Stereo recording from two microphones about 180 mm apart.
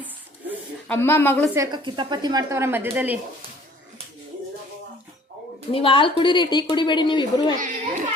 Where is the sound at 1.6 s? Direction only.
25° right (ahead or behind); by 3.2 s 10° right (ahead or behind).